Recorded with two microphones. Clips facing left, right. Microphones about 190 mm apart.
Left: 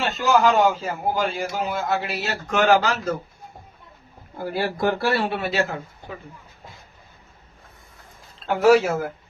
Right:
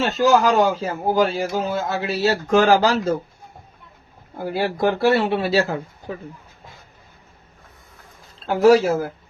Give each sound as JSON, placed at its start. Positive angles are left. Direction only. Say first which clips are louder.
{"t": 0.2, "sound": "a man's voice", "louder": "right 2 dB", "side_deg": -40}
{"t": 4.4, "sound": "speech", "louder": "right 3 dB", "side_deg": -15}
{"t": 5.4, "sound": "a man's voice", "louder": "right 4 dB", "side_deg": -35}
{"t": 8.4, "sound": "a man's voice", "louder": "right 2 dB", "side_deg": -35}